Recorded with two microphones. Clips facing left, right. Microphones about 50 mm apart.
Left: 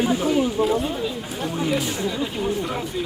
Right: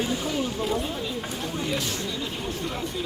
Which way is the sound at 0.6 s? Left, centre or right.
Centre.